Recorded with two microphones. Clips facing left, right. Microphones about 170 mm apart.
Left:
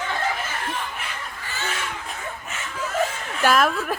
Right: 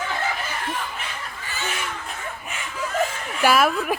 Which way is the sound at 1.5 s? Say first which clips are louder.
Even; 15° right (ahead or behind).